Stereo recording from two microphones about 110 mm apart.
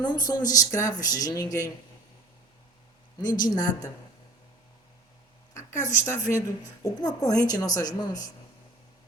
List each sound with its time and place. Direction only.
0.0 s speech: 40° left (ahead or behind)
3.2 s speech: 35° left (ahead or behind)
5.5 s a sound: 30° left (ahead or behind)
6.1 s speech: 25° left (ahead or behind)